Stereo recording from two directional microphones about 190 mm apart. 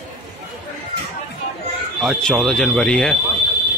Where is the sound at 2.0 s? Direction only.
5° left (ahead or behind).